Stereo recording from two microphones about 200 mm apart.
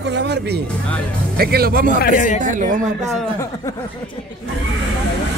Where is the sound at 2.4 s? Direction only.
40° right (ahead or behind).